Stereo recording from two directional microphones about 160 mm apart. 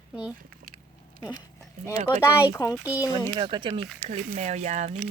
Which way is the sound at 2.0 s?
25° left (ahead or behind).